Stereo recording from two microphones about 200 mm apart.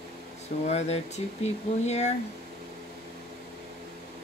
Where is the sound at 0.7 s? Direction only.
35° left (ahead or behind).